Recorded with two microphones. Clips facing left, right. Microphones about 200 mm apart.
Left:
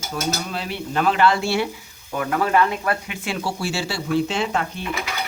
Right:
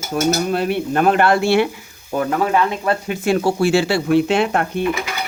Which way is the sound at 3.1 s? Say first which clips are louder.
Right 10 dB; 45° right (ahead or behind).